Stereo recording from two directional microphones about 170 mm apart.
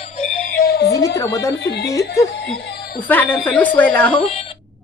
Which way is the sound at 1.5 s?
85° left.